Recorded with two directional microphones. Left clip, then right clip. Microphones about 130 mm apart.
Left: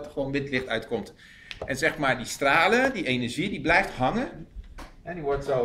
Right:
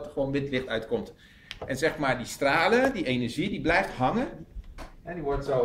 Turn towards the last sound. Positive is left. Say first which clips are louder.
# left 2 dB
turn(degrees=5)  # may be behind; listen again after turning